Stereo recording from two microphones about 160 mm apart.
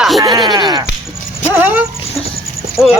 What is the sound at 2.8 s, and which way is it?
Speech, centre (ahead or behind).